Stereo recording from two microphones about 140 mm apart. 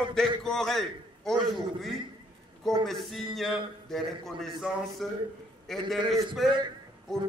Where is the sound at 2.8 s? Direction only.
Centre (ahead or behind).